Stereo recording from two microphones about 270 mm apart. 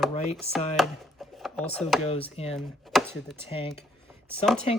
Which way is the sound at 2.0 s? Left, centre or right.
Left.